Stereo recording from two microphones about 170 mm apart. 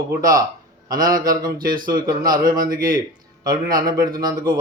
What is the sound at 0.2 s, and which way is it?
A man's voice, 20° right (ahead or behind).